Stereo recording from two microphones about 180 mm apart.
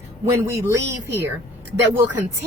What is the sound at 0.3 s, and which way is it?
Speech, 15° right (ahead or behind).